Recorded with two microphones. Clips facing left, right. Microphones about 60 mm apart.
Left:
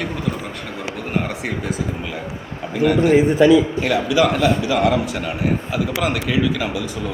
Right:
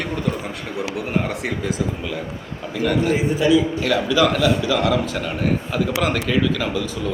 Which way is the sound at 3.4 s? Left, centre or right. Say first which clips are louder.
Left 5 dB; left.